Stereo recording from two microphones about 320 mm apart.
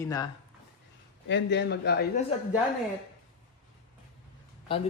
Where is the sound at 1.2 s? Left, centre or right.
Left.